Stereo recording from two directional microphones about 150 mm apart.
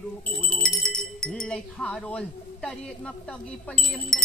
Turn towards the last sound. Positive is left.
turn(degrees=5)  # may be behind; listen again after turning